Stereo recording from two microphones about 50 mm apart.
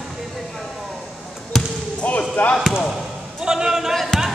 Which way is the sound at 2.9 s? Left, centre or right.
Centre.